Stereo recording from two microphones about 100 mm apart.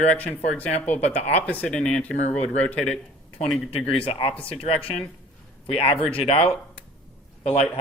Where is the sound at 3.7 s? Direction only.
70° left (ahead or behind).